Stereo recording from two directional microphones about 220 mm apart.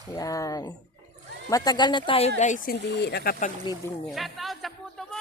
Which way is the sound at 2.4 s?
35° left (ahead or behind).